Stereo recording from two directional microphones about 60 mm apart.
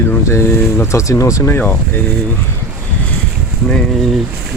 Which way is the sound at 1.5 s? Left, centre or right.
Left.